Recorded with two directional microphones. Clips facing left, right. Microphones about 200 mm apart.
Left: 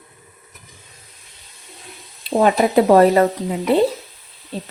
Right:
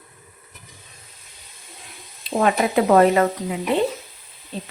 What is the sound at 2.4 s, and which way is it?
Speech, 35° left (ahead or behind).